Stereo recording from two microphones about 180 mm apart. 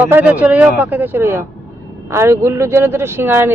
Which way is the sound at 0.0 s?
10° right (ahead or behind).